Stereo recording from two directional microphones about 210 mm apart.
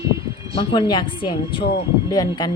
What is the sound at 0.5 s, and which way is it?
A woman's voice, 25° left (ahead or behind).